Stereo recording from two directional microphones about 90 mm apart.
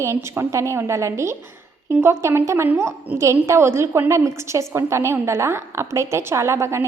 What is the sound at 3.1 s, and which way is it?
A woman's voice, 35° right (ahead or behind).